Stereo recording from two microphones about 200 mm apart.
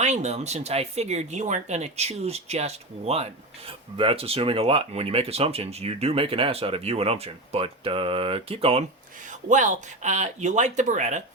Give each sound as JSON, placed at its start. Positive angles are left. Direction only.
{"t": 0.0, "sound": "speech", "side_deg": -35}